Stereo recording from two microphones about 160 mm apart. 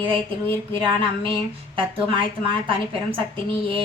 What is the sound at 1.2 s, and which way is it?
A woman's voice, 35° right (ahead or behind).